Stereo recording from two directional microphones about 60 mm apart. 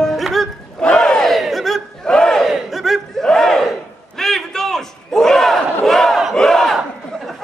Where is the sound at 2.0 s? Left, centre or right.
Centre.